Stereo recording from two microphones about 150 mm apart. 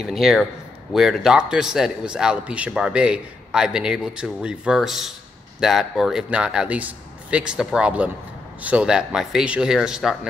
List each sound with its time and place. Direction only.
0.0 s a man's voice: centre (ahead or behind)